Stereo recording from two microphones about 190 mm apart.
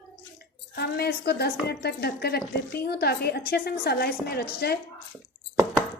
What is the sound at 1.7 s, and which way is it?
A woman's voice, 60° left (ahead or behind).